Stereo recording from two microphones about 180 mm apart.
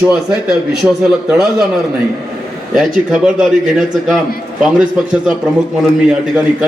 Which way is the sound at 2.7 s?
5° right (ahead or behind).